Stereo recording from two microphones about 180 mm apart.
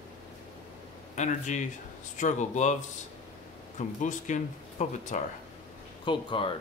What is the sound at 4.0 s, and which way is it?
Speech, 45° left (ahead or behind).